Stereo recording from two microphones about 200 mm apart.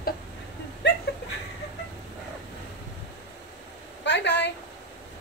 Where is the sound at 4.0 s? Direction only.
60° left (ahead or behind).